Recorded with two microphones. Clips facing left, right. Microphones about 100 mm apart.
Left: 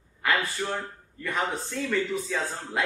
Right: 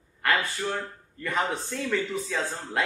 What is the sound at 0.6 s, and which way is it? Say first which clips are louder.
Speech: even; 20° left (ahead or behind).